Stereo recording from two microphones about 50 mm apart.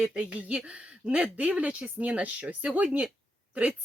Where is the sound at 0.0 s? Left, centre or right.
Centre.